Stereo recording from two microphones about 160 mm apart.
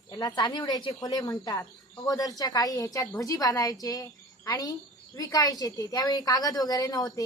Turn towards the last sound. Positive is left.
turn(degrees=20)  # may be behind; listen again after turning